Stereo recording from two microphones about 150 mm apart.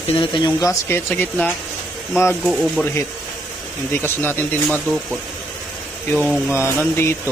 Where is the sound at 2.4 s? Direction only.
Centre (ahead or behind).